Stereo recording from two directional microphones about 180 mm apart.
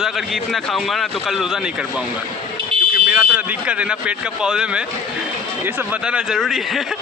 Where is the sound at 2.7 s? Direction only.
30° right (ahead or behind).